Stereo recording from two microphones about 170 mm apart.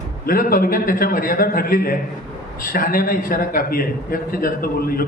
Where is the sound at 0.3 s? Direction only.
60° left (ahead or behind).